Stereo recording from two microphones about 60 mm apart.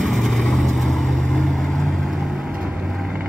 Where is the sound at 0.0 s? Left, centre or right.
Centre.